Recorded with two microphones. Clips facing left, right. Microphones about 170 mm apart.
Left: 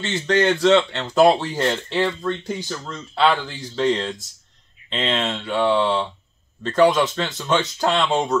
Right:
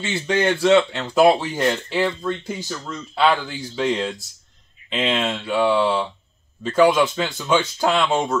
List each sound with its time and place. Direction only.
0.0 s speech: 5° right (ahead or behind)